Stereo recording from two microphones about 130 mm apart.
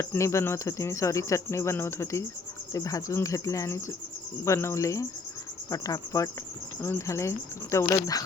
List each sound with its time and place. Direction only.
0.0 s speech: 20° left (ahead or behind)